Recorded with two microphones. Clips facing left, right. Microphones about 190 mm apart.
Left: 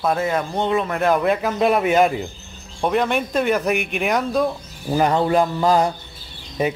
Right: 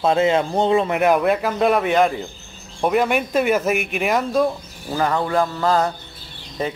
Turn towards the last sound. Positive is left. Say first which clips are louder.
# left 3 dB
turn(degrees=10)  # may be behind; listen again after turning